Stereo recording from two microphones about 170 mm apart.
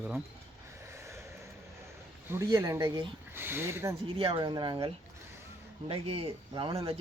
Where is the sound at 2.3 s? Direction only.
20° right (ahead or behind).